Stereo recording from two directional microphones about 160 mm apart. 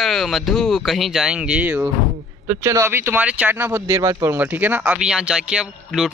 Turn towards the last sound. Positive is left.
turn(degrees=-5)  # may be behind; listen again after turning